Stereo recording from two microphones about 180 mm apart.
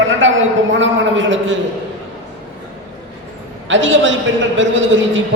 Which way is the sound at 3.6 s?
90° right.